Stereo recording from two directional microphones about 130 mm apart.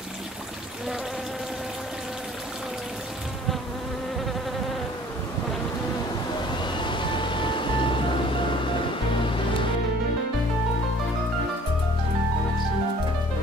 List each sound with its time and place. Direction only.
6.6 s music: 40° left (ahead or behind)